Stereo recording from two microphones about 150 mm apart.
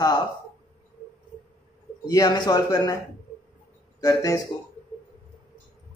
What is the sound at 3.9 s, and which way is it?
Speech, 20° left (ahead or behind).